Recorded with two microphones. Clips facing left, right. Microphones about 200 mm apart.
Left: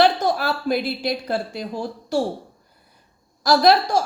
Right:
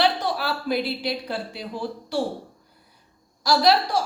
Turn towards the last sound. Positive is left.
turn(degrees=45)  # may be behind; listen again after turning